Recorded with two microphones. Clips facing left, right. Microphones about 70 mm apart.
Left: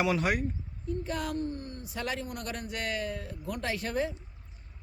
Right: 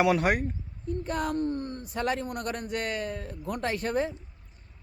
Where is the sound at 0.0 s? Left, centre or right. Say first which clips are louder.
Right 4 dB; right.